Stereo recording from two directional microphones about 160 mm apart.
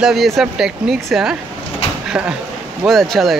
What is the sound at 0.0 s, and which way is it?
Speech, centre (ahead or behind).